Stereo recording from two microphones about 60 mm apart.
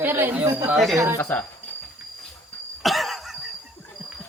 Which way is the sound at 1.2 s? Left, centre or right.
Left.